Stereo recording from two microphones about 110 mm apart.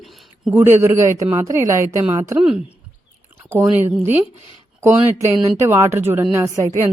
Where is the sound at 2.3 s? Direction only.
10° right (ahead or behind).